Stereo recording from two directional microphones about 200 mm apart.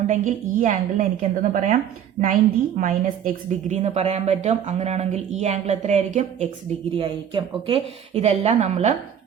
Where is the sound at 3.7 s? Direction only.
35° right (ahead or behind).